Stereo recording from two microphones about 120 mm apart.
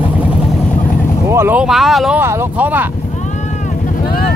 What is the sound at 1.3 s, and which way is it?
Boat, 20° right (ahead or behind).